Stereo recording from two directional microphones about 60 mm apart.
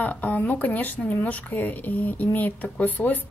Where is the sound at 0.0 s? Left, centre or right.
Left.